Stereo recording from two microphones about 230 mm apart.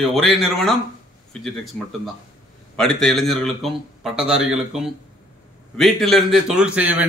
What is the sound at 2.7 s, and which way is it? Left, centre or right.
A man's voice, centre.